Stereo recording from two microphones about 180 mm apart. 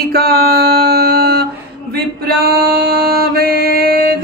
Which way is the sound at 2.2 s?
60° right (ahead or behind).